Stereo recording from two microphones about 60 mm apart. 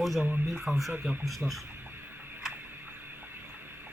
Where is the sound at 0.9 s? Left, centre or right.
Right.